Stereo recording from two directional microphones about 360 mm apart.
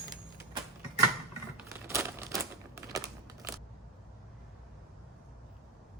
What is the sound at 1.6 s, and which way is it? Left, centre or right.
Crumpling, centre.